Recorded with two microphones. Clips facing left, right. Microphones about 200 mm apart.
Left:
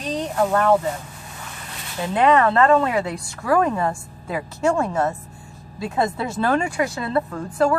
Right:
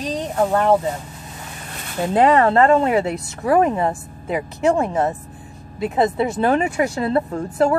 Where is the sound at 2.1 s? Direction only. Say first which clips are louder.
Right 2 dB; 35° right (ahead or behind).